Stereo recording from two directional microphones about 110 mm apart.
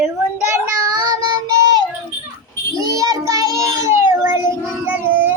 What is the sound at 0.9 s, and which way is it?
Child singing, 40° right (ahead or behind).